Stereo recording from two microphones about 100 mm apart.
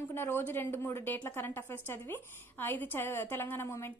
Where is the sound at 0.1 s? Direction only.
25° left (ahead or behind).